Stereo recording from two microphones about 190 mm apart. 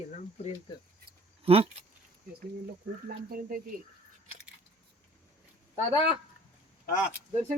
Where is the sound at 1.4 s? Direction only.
30° right (ahead or behind).